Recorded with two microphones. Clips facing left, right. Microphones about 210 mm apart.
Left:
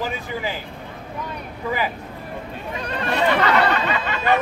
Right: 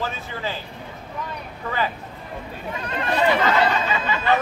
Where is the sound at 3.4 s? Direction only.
70° left (ahead or behind).